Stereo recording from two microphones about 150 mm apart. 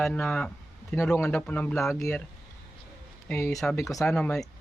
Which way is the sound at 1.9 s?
20° left (ahead or behind).